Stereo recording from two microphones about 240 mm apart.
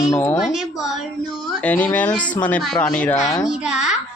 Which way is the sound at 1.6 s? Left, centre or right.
Centre.